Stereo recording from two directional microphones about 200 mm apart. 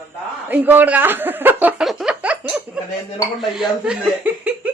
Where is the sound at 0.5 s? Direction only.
10° right (ahead or behind).